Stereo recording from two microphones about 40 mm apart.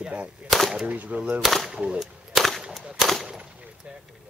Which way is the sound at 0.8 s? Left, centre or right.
Right.